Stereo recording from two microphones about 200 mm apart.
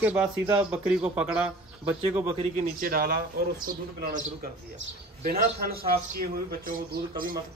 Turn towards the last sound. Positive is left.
turn(degrees=-45)  # may be behind; listen again after turning